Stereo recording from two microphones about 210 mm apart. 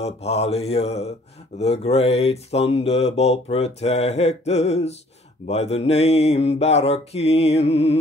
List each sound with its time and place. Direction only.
0.0 s mantra: 30° left (ahead or behind)